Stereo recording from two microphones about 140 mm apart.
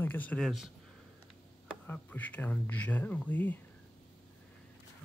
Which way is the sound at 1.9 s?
10° left (ahead or behind).